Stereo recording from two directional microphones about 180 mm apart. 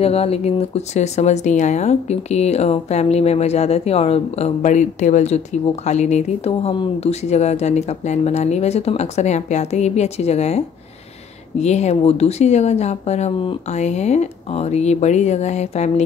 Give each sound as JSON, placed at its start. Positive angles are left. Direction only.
{"t": 0.0, "sound": "speech", "side_deg": 35}
{"t": 11.6, "sound": "speech", "side_deg": 40}